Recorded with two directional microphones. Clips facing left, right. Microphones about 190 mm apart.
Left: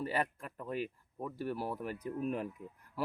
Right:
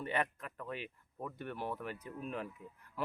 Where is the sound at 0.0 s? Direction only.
35° left (ahead or behind).